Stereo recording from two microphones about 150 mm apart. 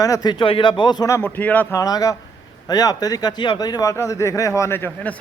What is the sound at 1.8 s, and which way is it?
Speech, 25° left (ahead or behind).